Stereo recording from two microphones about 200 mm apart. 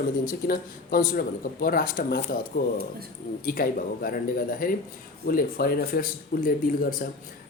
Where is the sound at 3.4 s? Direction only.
45° left (ahead or behind).